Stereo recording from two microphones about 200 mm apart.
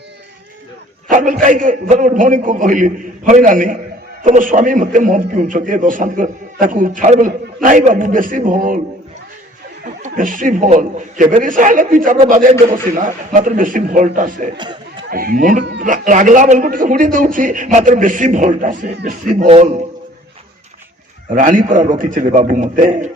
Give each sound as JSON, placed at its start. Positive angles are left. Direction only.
{"t": 1.1, "sound": "a man's voice", "side_deg": -40}
{"t": 9.8, "sound": "a man's voice", "side_deg": -40}
{"t": 14.6, "sound": "a sound", "side_deg": -20}
{"t": 15.1, "sound": "a man's voice", "side_deg": -45}
{"t": 21.3, "sound": "a man's voice", "side_deg": -40}